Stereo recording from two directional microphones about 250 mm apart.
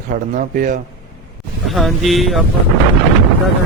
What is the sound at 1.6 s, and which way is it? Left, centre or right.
Speech, centre.